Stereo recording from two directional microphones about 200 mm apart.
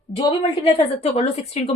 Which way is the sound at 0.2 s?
25° left (ahead or behind).